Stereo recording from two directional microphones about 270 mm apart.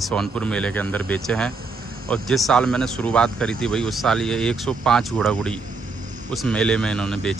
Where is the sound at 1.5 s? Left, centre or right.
Right.